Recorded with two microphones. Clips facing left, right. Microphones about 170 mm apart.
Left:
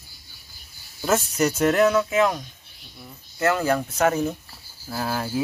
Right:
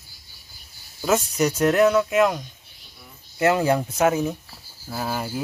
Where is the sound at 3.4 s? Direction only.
15° right (ahead or behind).